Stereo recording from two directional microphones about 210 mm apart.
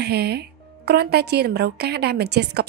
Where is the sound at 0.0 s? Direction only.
50° right (ahead or behind).